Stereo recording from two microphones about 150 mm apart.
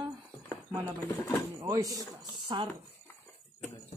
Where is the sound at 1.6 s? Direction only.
25° right (ahead or behind).